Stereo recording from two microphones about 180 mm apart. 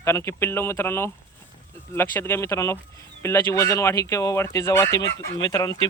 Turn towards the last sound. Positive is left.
turn(degrees=20)  # may be behind; listen again after turning